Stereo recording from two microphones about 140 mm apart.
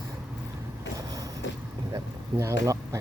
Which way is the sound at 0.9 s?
25° right (ahead or behind).